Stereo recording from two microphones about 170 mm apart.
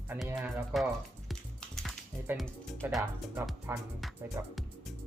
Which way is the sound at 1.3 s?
Centre (ahead or behind).